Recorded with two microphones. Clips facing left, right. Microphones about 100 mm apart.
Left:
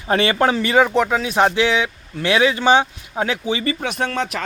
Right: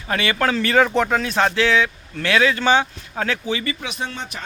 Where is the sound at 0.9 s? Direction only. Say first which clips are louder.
Left 1 dB; 5° left (ahead or behind); by 3.6 s 20° left (ahead or behind).